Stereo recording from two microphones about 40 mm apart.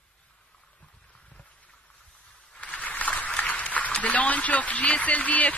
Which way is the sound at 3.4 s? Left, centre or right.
Left.